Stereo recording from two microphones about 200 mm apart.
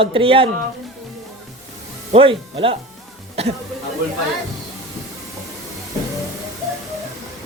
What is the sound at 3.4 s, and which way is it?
Music, 30° right (ahead or behind).